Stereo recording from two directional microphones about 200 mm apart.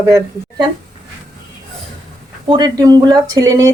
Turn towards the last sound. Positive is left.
turn(degrees=-15)  # may be behind; listen again after turning